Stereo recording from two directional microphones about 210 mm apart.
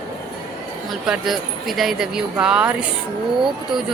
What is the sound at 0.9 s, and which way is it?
Speech, centre (ahead or behind).